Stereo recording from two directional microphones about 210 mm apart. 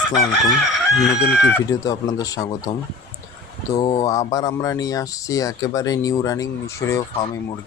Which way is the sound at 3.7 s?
20° left (ahead or behind).